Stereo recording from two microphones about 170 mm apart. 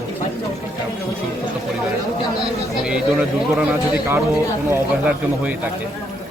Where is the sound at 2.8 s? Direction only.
5° right (ahead or behind).